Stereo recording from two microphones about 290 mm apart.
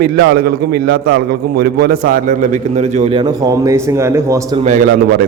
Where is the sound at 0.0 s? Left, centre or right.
Right; by 4.4 s centre.